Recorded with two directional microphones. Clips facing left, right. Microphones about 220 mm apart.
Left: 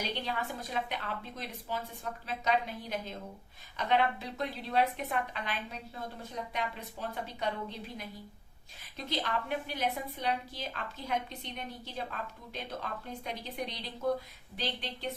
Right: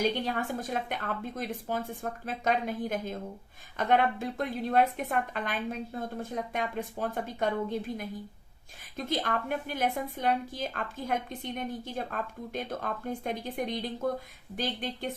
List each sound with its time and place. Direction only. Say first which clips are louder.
0.0 s a woman's voice: right 7 dB; 45° right (ahead or behind)